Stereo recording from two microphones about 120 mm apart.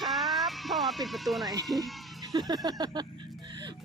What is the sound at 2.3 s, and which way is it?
Speech, 35° right (ahead or behind).